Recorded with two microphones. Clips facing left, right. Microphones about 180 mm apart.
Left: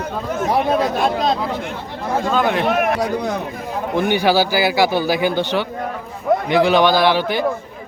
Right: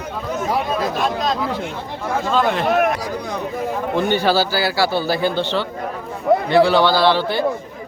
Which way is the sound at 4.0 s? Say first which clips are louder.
Left 2 dB; 15° left (ahead or behind).